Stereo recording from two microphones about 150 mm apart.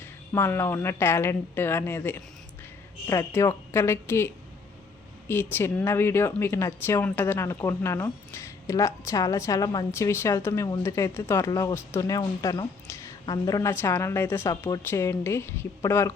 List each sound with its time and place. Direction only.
0.0 s speech: 15° left (ahead or behind)
5.3 s speech: 15° left (ahead or behind)